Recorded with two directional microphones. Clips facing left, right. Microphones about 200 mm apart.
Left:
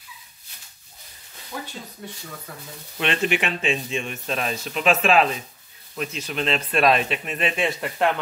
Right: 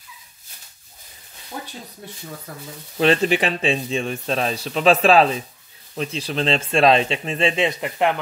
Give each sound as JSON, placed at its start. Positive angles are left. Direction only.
{"t": 3.0, "sound": "speech", "side_deg": -35}